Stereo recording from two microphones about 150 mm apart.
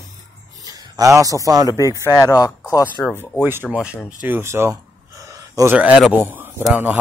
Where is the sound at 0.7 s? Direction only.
25° right (ahead or behind).